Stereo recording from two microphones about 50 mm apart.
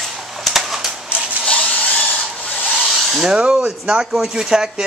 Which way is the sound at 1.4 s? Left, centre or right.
Left.